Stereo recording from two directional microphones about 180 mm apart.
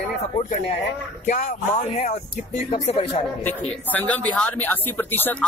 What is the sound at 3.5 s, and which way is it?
Speech, 10° left (ahead or behind).